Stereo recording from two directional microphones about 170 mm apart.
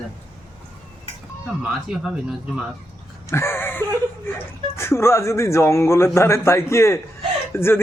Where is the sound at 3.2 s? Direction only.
15° left (ahead or behind).